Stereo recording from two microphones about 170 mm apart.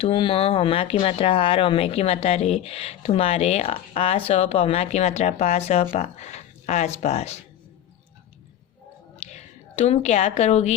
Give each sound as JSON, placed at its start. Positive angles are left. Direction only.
{"t": 0.0, "sound": "speech", "side_deg": 30}
{"t": 9.2, "sound": "a woman's voice", "side_deg": 45}